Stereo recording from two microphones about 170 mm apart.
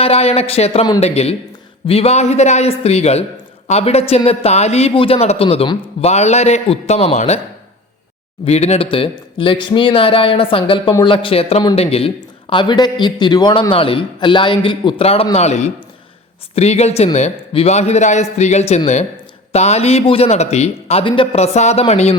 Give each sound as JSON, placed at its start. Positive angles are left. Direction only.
{"t": 0.0, "sound": "a man's voice", "side_deg": 35}
{"t": 8.4, "sound": "a man's voice", "side_deg": 40}